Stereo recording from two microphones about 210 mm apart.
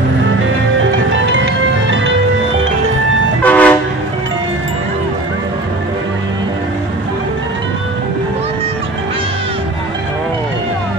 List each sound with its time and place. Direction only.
0.7 s music: 60° right (ahead or behind)
3.4 s train: 5° left (ahead or behind)